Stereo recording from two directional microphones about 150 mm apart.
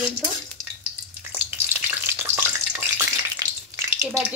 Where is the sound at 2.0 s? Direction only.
15° right (ahead or behind).